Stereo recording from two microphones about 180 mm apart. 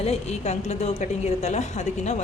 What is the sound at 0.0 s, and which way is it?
A woman's voice, 35° left (ahead or behind).